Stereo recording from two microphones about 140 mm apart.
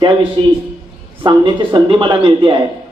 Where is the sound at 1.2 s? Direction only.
35° right (ahead or behind).